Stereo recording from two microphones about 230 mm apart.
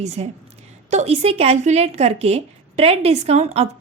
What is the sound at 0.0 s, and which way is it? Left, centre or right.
A woman's voice, right.